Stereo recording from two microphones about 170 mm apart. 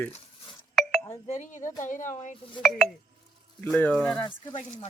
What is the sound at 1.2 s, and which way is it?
Speech, 45° left (ahead or behind).